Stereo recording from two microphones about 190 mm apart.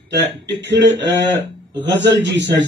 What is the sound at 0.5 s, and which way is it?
Speech, 70° right (ahead or behind).